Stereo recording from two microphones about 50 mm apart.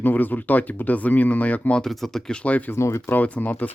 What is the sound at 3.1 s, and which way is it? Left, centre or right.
Speech, left.